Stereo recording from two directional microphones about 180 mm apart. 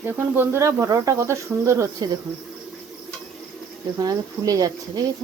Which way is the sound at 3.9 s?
20° right (ahead or behind).